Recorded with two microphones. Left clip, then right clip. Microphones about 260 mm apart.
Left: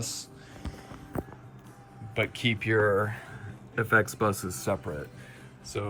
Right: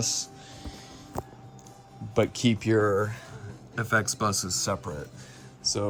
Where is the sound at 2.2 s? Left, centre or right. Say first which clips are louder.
Right 3 dB; centre.